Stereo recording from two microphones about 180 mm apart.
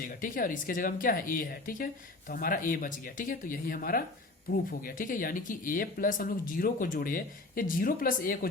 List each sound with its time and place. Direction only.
0.2 s speech: 50° left (ahead or behind)